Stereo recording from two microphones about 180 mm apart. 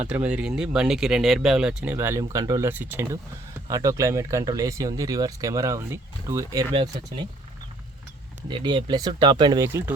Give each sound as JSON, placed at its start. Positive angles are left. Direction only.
{"t": 0.0, "sound": "speech", "side_deg": -5}
{"t": 8.4, "sound": "speech", "side_deg": -25}
{"t": 9.6, "sound": "speech", "side_deg": -15}